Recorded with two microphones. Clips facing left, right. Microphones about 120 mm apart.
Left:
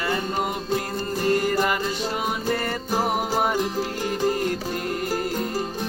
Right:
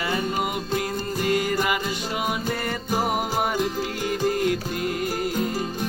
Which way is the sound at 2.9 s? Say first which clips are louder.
Left 1 dB; 35° left (ahead or behind).